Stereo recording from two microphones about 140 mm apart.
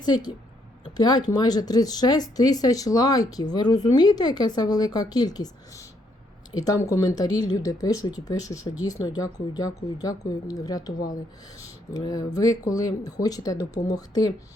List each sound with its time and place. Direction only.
0.0 s speech: 30° left (ahead or behind)
11.9 s speech: 25° left (ahead or behind)